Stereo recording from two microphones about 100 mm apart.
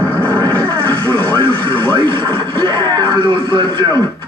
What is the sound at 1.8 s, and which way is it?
Speech, 50° right (ahead or behind).